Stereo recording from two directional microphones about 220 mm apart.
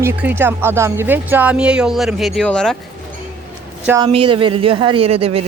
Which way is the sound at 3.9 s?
15° right (ahead or behind).